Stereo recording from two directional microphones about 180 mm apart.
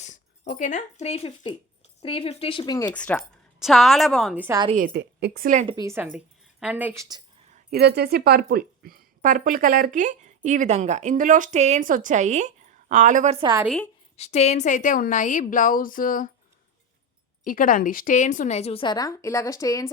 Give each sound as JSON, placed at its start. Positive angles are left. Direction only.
{"t": 0.0, "sound": "speech", "side_deg": 45}
{"t": 2.9, "sound": "a woman's voice", "side_deg": 5}
{"t": 4.4, "sound": "a woman's voice", "side_deg": -20}
{"t": 4.9, "sound": "a woman's voice", "side_deg": -65}
{"t": 5.6, "sound": "a woman's voice", "side_deg": -20}
{"t": 7.7, "sound": "speech", "side_deg": -65}
{"t": 13.4, "sound": "a woman's voice", "side_deg": -20}
{"t": 13.7, "sound": "a woman's voice", "side_deg": 5}
{"t": 14.2, "sound": "a woman's voice", "side_deg": 35}
{"t": 17.4, "sound": "a woman's voice", "side_deg": 50}